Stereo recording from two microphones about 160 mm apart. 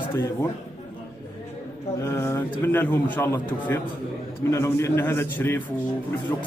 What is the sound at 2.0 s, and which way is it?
A man's voice, 15° left (ahead or behind).